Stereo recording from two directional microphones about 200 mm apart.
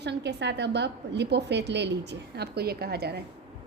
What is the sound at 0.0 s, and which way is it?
A woman's voice, 60° right (ahead or behind).